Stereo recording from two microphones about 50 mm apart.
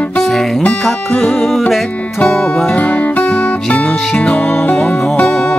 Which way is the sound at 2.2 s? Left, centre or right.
Left.